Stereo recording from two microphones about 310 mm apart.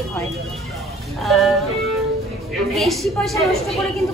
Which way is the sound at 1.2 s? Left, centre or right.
Centre.